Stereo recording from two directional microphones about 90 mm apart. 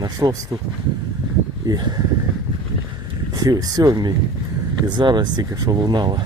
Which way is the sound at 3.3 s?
45° right (ahead or behind).